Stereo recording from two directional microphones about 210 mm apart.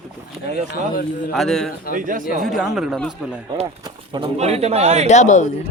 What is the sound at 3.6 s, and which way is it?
A man's voice, 20° right (ahead or behind).